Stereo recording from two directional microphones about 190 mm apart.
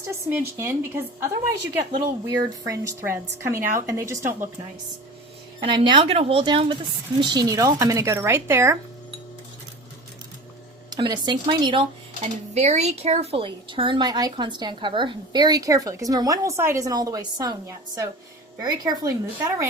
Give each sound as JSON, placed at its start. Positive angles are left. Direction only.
{"t": 0.1, "sound": "a woman's voice", "side_deg": -10}
{"t": 5.6, "sound": "a woman's voice", "side_deg": -25}
{"t": 10.8, "sound": "speech", "side_deg": -20}
{"t": 12.2, "sound": "speech", "side_deg": -35}